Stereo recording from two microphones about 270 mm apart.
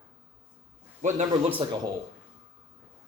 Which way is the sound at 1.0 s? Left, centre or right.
Right.